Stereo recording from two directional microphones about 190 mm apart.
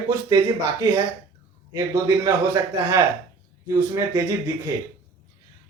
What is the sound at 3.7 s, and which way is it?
Speech, 15° right (ahead or behind).